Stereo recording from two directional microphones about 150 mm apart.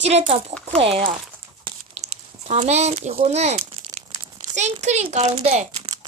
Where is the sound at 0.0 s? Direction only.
45° right (ahead or behind).